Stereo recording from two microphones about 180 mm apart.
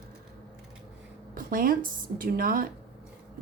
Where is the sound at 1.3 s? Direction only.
50° right (ahead or behind).